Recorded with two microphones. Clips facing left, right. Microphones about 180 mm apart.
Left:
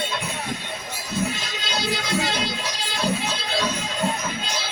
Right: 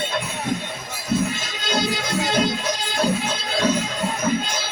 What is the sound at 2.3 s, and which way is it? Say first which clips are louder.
Music: right 6 dB; 50° right (ahead or behind).